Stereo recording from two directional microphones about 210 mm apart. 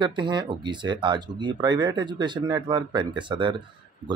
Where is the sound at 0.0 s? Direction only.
20° right (ahead or behind).